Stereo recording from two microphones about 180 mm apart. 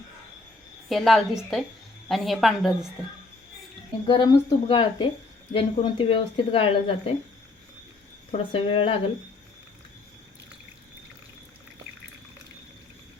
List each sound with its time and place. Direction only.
0.9 s a woman's voice: centre (ahead or behind)
4.0 s speech: 25° left (ahead or behind)
8.3 s speech: 30° left (ahead or behind)